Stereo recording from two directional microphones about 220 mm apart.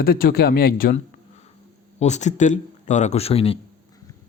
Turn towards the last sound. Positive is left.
turn(degrees=25)  # may be behind; listen again after turning